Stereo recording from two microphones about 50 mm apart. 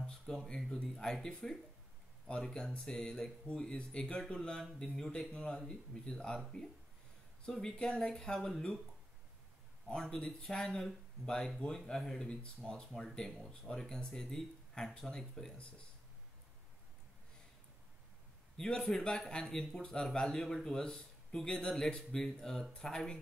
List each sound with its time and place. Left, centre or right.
0.0 s a sound: centre
0.8 s speech: centre
6.1 s speech: centre
7.7 s speech: centre
9.8 s speech: centre
18.6 s speech: centre